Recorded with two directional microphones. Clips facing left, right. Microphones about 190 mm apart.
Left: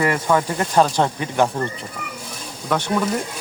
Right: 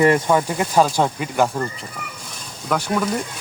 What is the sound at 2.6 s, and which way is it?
Speech, 5° right (ahead or behind).